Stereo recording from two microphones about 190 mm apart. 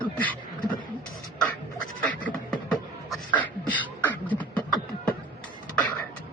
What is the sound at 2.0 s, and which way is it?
Beatboxing, 5° left (ahead or behind).